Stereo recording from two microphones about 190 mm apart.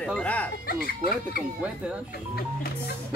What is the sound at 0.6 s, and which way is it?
Speech, 55° left (ahead or behind).